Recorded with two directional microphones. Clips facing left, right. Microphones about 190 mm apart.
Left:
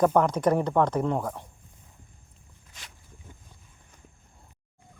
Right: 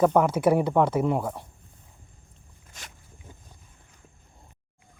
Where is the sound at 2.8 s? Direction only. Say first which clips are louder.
Right 3 dB; 45° right (ahead or behind).